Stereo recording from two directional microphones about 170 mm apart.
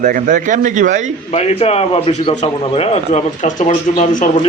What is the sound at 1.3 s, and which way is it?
A man's voice, 35° left (ahead or behind).